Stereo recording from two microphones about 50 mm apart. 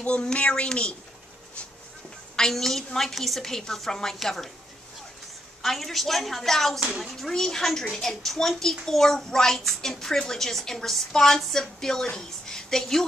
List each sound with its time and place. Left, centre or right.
0.0 s a woman's voice: left
2.3 s a woman's voice: centre
5.6 s a woman's voice: centre